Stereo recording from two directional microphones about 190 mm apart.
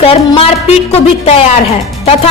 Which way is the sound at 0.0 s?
30° left (ahead or behind).